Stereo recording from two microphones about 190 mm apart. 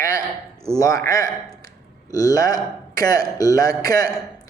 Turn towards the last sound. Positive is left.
turn(degrees=20)  # may be behind; listen again after turning